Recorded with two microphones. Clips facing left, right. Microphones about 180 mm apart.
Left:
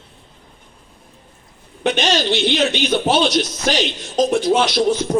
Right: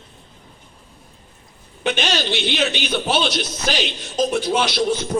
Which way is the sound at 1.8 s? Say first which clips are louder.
Left 4 dB; 40° left (ahead or behind).